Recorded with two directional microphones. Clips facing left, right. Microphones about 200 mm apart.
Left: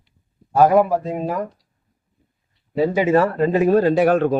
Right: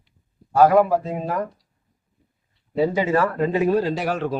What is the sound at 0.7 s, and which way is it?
Speech, 15° left (ahead or behind).